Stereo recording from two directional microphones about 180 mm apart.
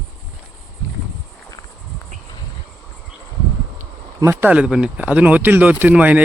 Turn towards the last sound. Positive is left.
turn(degrees=-10)  # may be behind; listen again after turning